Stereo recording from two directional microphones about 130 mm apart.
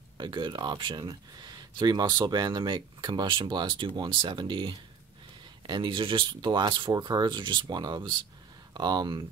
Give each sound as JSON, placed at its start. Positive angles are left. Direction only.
{"t": 0.2, "sound": "speech", "side_deg": -35}